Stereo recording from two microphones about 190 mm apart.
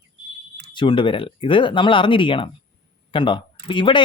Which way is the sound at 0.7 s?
25° left (ahead or behind).